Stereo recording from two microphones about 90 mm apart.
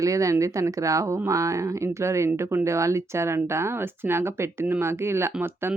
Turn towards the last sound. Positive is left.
turn(degrees=-25)  # may be behind; listen again after turning